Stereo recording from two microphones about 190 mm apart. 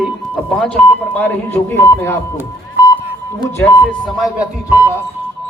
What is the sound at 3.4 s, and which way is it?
Speech, 10° left (ahead or behind).